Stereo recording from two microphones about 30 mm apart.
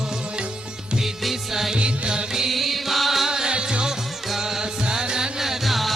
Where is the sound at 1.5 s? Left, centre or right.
Centre.